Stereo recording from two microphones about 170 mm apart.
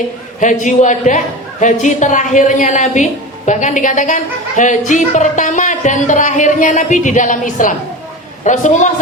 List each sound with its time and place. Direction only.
0.3 s a man's voice: 45° left (ahead or behind)